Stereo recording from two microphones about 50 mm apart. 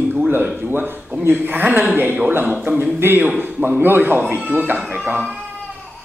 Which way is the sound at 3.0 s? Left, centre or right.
Right.